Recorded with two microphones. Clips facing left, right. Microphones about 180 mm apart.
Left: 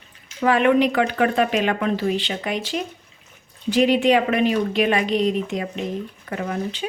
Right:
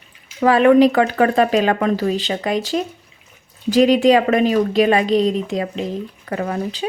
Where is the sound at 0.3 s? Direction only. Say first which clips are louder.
Right 5 dB; 35° right (ahead or behind).